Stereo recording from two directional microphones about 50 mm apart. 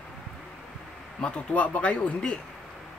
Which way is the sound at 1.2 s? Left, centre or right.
Left.